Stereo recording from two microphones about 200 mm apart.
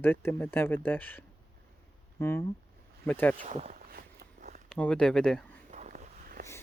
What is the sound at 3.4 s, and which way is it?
Speech, 35° right (ahead or behind).